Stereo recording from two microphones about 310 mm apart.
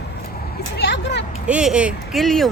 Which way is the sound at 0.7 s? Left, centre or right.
Left.